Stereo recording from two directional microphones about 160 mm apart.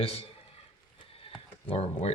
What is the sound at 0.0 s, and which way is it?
Speech, 40° left (ahead or behind).